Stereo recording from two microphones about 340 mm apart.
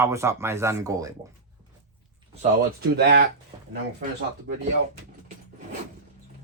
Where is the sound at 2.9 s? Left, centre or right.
Right.